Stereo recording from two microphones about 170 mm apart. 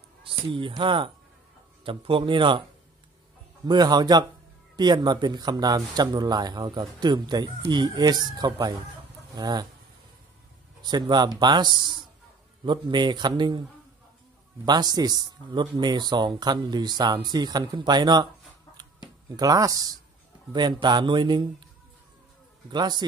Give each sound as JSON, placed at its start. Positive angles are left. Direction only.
{"t": 0.2, "sound": "speech", "side_deg": -30}
{"t": 3.6, "sound": "speech", "side_deg": -25}
{"t": 10.8, "sound": "speech", "side_deg": -25}
{"t": 22.7, "sound": "speech", "side_deg": -25}